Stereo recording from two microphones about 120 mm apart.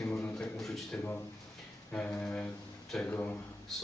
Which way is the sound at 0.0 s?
10° left (ahead or behind).